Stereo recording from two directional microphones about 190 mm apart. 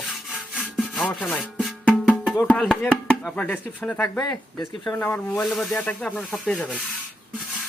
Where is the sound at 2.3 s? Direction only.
5° left (ahead or behind).